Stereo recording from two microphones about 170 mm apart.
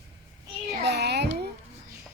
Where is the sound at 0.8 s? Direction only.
80° right.